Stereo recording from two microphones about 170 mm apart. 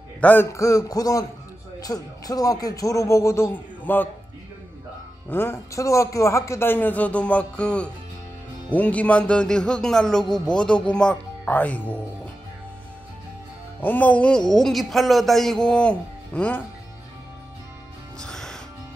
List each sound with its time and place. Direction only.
0.2 s a man's voice: 10° left (ahead or behind)
5.3 s a man's voice: 15° left (ahead or behind)
13.7 s a man's voice: 10° left (ahead or behind)
18.2 s music: 5° left (ahead or behind)